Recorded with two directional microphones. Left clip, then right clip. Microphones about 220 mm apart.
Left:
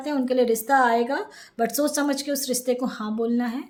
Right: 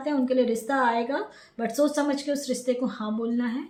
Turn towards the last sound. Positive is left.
turn(degrees=45)  # may be behind; listen again after turning